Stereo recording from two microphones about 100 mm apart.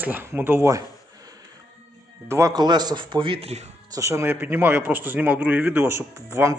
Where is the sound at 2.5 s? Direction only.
45° right (ahead or behind); by 3.6 s 80° right.